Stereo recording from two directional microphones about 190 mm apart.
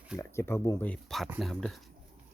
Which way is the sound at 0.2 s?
15° left (ahead or behind).